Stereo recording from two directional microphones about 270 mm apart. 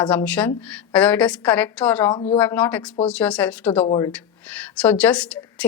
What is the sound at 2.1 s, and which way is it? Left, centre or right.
Speech, centre.